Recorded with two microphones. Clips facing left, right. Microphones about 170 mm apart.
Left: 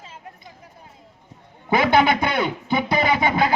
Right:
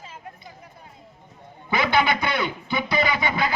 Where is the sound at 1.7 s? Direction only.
50° left (ahead or behind).